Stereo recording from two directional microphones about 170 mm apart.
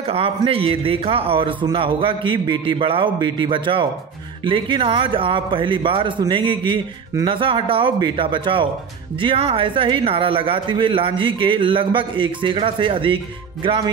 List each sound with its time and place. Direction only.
0.1 s a man's voice: 35° right (ahead or behind)